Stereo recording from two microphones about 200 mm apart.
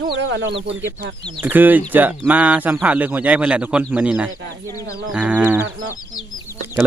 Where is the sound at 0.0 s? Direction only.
60° right (ahead or behind).